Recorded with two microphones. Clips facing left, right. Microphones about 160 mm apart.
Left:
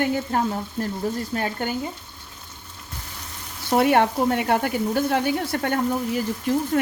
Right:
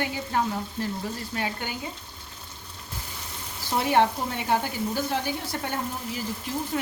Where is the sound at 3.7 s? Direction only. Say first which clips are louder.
Left 4 dB; 60° left (ahead or behind).